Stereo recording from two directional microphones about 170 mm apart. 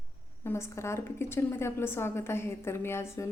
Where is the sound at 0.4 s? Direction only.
15° left (ahead or behind).